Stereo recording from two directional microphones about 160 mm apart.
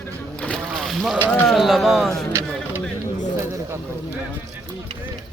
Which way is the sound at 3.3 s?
15° right (ahead or behind).